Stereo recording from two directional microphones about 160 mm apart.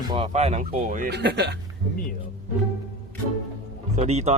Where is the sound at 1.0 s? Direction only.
90° right.